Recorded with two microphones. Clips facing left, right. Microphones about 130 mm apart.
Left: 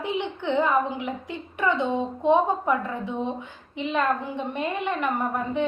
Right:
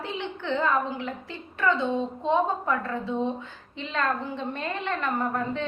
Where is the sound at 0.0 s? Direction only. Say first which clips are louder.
Left 5 dB; 15° left (ahead or behind).